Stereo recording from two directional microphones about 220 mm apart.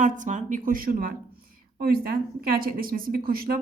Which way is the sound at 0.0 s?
35° right (ahead or behind).